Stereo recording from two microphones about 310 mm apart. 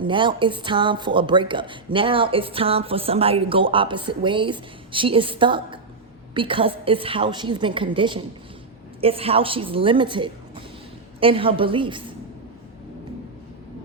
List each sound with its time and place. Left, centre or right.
0.0 s speech: centre